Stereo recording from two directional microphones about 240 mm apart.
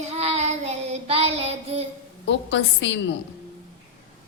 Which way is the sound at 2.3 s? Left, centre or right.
Left.